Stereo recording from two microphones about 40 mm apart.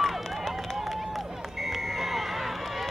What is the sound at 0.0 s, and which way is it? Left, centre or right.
Run, centre.